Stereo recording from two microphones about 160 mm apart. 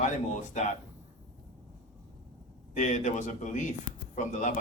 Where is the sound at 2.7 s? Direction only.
50° left (ahead or behind).